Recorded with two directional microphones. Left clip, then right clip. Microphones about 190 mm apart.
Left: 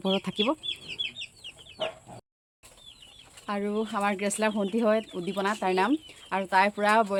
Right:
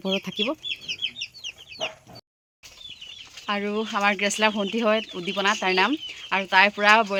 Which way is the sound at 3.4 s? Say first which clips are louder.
Right 4 dB; centre (ahead or behind).